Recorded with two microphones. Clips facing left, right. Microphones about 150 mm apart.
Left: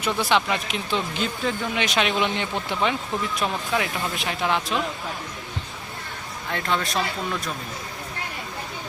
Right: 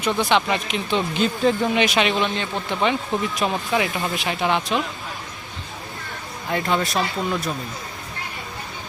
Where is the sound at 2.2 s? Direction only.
15° left (ahead or behind).